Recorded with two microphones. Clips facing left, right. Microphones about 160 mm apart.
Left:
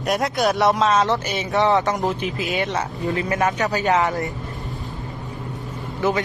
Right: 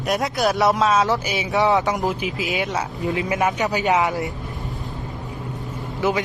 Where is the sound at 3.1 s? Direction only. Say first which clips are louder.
Even; 20° right (ahead or behind).